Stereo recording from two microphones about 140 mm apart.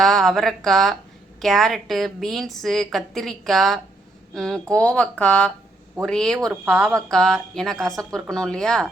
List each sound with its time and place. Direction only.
0.0 s a woman's voice: 5° left (ahead or behind)